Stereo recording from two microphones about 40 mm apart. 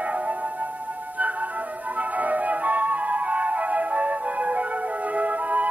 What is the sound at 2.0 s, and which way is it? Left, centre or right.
Flute, right.